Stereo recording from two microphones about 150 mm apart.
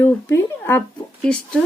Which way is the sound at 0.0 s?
15° left (ahead or behind).